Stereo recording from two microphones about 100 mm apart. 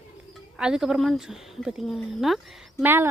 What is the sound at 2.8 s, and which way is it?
Speech, 20° right (ahead or behind).